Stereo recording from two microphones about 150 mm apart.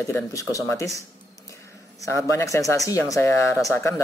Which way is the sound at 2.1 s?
20° left (ahead or behind).